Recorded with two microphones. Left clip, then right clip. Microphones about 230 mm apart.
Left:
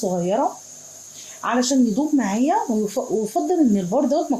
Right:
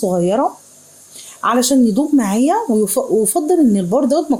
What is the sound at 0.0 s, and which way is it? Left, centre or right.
Speech, right.